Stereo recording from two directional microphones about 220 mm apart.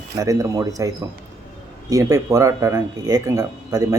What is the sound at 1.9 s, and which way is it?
Speech, 15° right (ahead or behind).